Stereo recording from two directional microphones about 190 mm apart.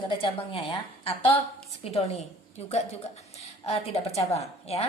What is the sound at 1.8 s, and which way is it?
A woman's voice, 35° left (ahead or behind).